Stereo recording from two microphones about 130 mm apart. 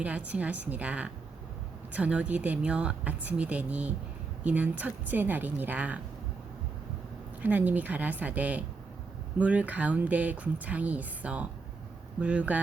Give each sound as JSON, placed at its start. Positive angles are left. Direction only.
{"t": 0.0, "sound": "speech", "side_deg": -10}
{"t": 7.4, "sound": "speech", "side_deg": -10}